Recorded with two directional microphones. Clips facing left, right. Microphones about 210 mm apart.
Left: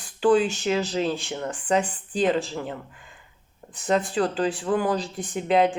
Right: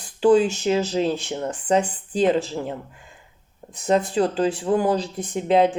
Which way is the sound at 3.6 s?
25° right (ahead or behind).